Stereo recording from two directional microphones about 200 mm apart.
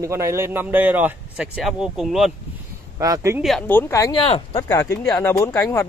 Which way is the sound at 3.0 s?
15° right (ahead or behind).